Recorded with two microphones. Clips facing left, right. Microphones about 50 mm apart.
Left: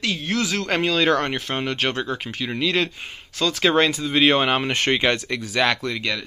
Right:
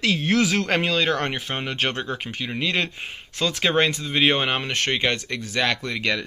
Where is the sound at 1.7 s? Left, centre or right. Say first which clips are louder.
Right 1 dB; right.